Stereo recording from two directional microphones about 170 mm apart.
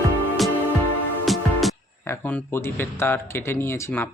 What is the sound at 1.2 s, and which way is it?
Music, centre (ahead or behind).